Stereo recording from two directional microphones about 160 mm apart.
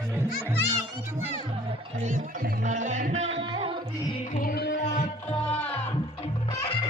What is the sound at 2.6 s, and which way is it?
Music, 50° right (ahead or behind).